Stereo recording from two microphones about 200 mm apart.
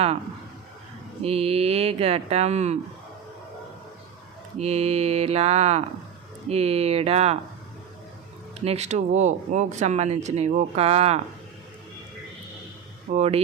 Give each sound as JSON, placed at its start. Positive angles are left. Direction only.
{"t": 1.2, "sound": "speech", "side_deg": -30}
{"t": 4.5, "sound": "speech", "side_deg": -30}
{"t": 8.6, "sound": "speech", "side_deg": -35}
{"t": 13.1, "sound": "speech", "side_deg": -30}